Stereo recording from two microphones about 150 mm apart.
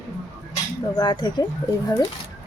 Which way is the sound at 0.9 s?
25° left (ahead or behind).